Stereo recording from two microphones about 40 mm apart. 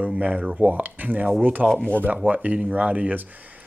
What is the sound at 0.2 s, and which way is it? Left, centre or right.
Speech, right.